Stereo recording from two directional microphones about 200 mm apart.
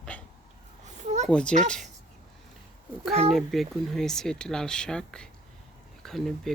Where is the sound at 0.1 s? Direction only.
5° left (ahead or behind).